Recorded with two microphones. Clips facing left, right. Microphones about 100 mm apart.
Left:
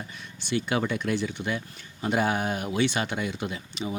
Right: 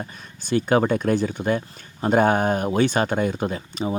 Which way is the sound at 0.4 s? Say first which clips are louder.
Right 8 dB; 45° right (ahead or behind).